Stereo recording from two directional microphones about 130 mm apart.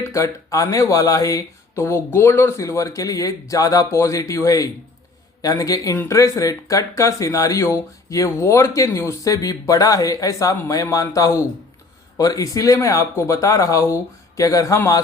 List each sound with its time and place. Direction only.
0.0 s speech: 25° left (ahead or behind)